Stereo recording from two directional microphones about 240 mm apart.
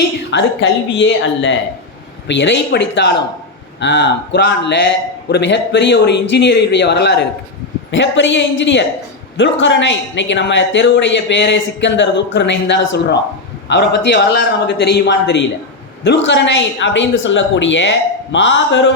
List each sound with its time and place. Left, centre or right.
0.3 s a man's voice: left